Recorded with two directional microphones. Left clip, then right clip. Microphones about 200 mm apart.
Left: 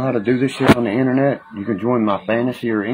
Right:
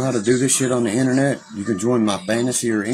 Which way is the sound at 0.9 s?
15° right (ahead or behind).